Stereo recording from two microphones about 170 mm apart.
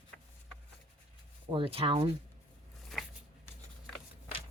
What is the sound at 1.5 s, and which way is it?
Speech, 30° right (ahead or behind).